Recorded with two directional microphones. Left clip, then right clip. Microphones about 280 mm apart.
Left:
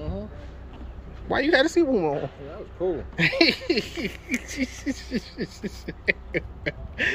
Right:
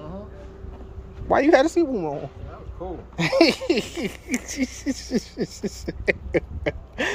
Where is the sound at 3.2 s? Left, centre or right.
Centre.